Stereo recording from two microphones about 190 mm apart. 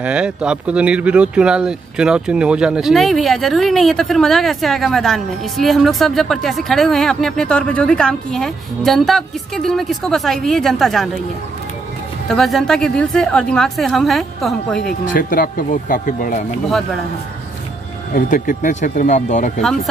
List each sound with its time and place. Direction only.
0.0 s speech: 5° right (ahead or behind)
12.3 s speech: centre (ahead or behind)
14.9 s speech: 50° left (ahead or behind)
18.1 s speech: 45° left (ahead or behind)